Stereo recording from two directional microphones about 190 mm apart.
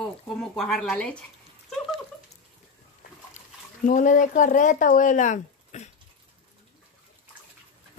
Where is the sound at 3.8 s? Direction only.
45° left (ahead or behind).